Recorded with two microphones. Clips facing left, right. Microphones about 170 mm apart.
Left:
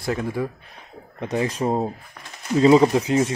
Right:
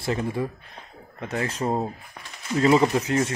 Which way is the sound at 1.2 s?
20° left (ahead or behind).